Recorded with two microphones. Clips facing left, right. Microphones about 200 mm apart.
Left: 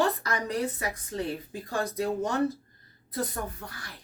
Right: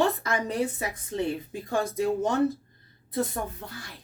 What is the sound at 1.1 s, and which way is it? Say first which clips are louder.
Speech: right 6 dB; 25° right (ahead or behind).